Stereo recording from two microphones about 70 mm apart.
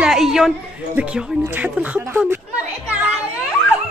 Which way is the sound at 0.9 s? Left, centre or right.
Centre.